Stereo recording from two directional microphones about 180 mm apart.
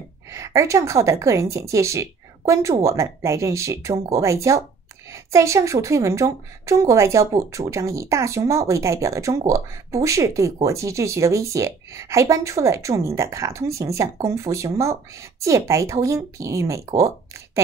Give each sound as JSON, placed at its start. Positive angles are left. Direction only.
{"t": 0.3, "sound": "a woman's voice", "side_deg": -15}